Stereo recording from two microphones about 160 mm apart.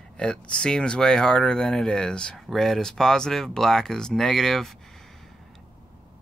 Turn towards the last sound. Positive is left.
turn(degrees=0)  # may be behind; listen again after turning